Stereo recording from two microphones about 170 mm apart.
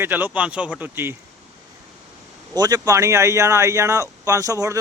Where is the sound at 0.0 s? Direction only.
10° right (ahead or behind).